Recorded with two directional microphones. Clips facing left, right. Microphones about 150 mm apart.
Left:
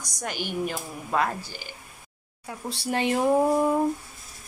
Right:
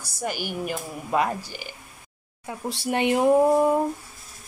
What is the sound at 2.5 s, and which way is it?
Speech, 25° right (ahead or behind).